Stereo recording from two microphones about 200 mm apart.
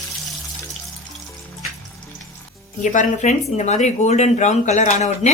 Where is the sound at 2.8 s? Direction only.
40° left (ahead or behind).